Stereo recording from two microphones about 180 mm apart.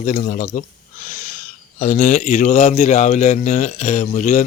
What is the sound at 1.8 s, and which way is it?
A man's voice, 40° left (ahead or behind).